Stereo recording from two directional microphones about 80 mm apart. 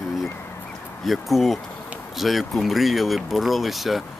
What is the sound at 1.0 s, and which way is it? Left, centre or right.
Speech, centre.